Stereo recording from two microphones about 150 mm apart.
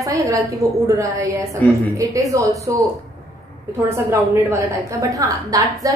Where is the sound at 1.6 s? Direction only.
15° left (ahead or behind).